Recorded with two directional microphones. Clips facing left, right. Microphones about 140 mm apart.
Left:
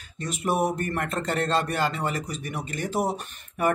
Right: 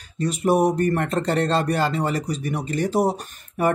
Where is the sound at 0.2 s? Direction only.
35° right (ahead or behind).